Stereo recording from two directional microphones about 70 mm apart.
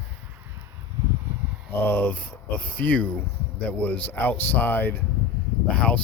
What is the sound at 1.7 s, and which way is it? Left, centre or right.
Speech, left.